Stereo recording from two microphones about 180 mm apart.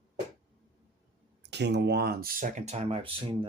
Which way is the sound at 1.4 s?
70° right (ahead or behind).